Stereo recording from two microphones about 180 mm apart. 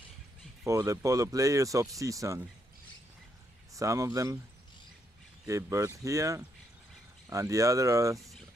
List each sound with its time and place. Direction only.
0.7 s speech: 20° right (ahead or behind)
3.7 s speech: 15° right (ahead or behind)
5.5 s speech: 15° right (ahead or behind)